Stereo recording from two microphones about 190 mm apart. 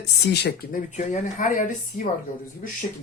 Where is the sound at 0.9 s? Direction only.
40° left (ahead or behind).